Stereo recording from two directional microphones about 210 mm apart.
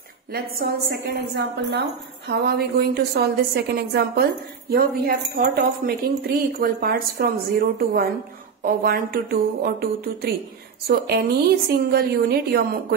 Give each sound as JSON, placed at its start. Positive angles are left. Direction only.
{"t": 0.3, "sound": "speech", "side_deg": -45}